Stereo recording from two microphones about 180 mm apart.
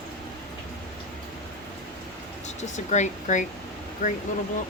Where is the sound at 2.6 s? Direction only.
40° left (ahead or behind).